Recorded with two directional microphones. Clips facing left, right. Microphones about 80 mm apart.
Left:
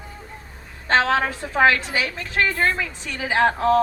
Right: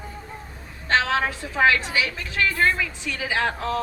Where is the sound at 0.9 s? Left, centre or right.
Left.